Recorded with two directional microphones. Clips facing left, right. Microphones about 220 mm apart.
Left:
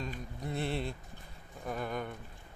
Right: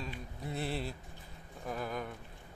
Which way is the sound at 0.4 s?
Centre (ahead or behind).